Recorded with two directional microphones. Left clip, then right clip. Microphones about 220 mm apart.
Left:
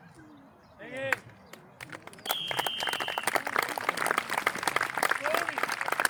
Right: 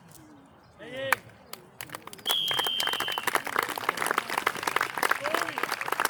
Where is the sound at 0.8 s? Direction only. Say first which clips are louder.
Right 1 dB; 50° right (ahead or behind).